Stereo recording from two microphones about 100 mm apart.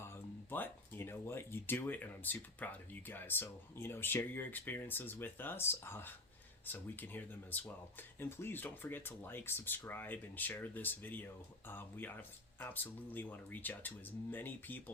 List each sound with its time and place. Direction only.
0.0 s speech: 20° left (ahead or behind)